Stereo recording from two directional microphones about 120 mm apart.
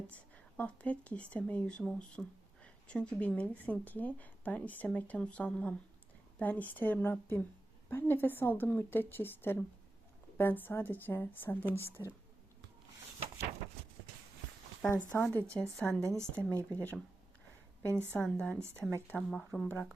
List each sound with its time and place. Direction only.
0.1 s speech: 10° left (ahead or behind)
12.0 s speech: 30° left (ahead or behind)
15.2 s speech: 15° left (ahead or behind)
16.0 s a woman's voice: 25° right (ahead or behind)
16.4 s speech: 15° left (ahead or behind)
17.8 s a woman's voice: 20° right (ahead or behind)
18.2 s speech: 10° left (ahead or behind)
18.6 s a woman's voice: 20° right (ahead or behind)
19.1 s speech: 5° left (ahead or behind)
19.6 s speech: 10° left (ahead or behind)